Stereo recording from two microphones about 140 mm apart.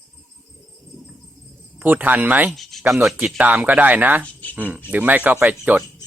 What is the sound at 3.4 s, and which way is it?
Speech, 10° right (ahead or behind).